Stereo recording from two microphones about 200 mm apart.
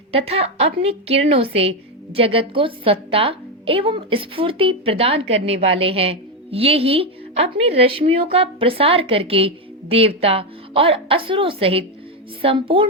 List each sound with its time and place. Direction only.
0.1 s a woman's voice: 30° right (ahead or behind)